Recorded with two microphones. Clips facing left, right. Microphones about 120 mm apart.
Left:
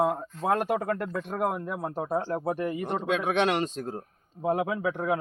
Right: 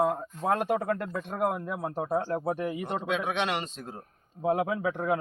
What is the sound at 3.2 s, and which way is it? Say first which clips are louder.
Speech: left 5 dB; 45° left (ahead or behind).